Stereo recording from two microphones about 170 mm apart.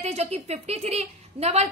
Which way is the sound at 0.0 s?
40° right (ahead or behind).